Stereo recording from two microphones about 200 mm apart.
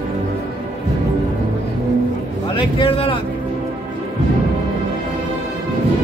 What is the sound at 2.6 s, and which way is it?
Vehicle, 25° left (ahead or behind).